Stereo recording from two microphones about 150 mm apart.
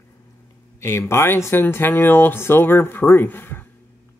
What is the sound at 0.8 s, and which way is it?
Speech, 15° left (ahead or behind).